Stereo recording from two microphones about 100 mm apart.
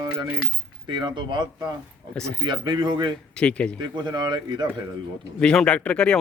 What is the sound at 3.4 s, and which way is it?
Speech, 10° left (ahead or behind).